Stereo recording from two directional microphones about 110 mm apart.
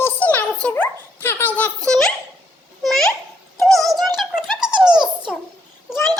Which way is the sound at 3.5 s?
Centre (ahead or behind).